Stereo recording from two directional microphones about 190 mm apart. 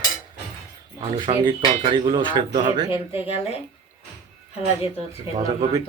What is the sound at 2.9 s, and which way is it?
Speech, 30° left (ahead or behind).